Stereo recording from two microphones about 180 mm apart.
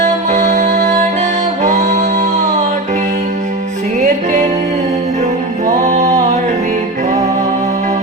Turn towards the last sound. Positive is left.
turn(degrees=-20)  # may be behind; listen again after turning